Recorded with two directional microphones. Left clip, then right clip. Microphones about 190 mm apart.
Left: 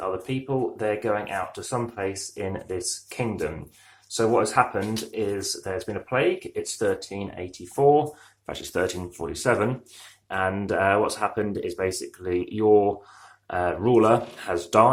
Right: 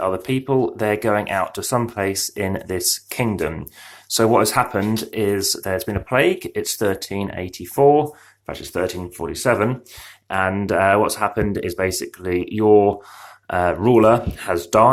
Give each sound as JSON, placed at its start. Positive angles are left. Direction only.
{"t": 0.0, "sound": "speech", "side_deg": -40}
{"t": 8.4, "sound": "speech", "side_deg": -10}